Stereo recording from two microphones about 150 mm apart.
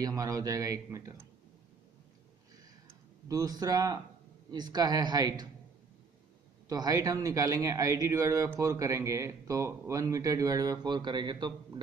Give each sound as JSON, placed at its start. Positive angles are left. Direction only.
{"t": 0.0, "sound": "speech", "side_deg": -25}
{"t": 3.3, "sound": "speech", "side_deg": -25}
{"t": 6.7, "sound": "speech", "side_deg": -25}